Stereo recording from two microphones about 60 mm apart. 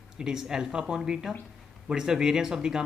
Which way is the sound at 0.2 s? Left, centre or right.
Centre.